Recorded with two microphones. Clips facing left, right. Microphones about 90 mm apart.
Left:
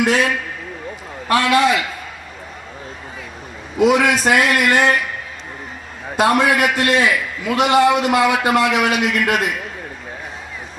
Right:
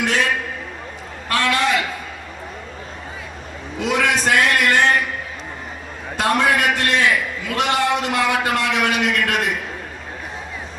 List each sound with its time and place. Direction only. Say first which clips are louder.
1.3 s a man's voice: left 5 dB; 10° left (ahead or behind)
3.8 s a man's voice: left 5 dB; 10° left (ahead or behind)
6.1 s a man's voice: left 3 dB; 10° left (ahead or behind)